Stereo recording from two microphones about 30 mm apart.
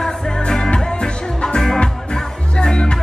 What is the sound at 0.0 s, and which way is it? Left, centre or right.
Music, centre.